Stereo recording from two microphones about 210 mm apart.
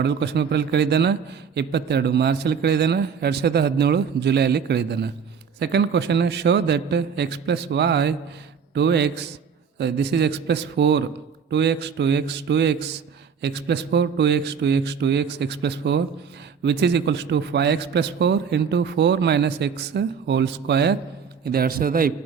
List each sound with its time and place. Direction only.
0.0 s a man's voice: 55° right (ahead or behind)